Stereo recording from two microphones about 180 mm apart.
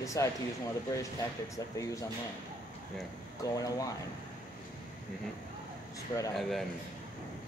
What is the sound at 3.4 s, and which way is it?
Speech, 20° left (ahead or behind).